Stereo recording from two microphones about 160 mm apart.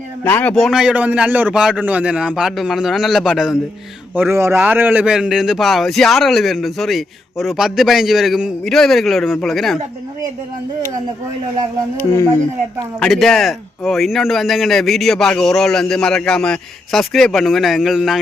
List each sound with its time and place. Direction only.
0.3 s a man's voice: 10° left (ahead or behind)
4.1 s a man's voice: 15° right (ahead or behind); by 9.7 s centre (ahead or behind)
11.9 s speech: 15° left (ahead or behind)
13.0 s a man's voice: centre (ahead or behind)